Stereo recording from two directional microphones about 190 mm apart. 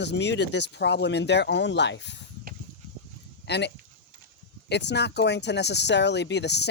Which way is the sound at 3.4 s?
65° left (ahead or behind).